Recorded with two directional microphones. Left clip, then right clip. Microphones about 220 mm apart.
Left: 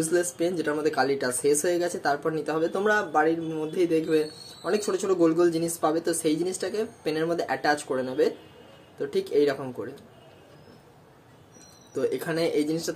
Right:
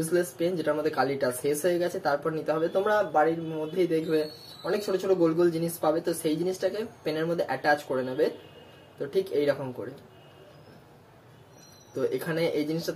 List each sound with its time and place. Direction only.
0.0 s speech: 25° left (ahead or behind)
11.9 s speech: 25° left (ahead or behind)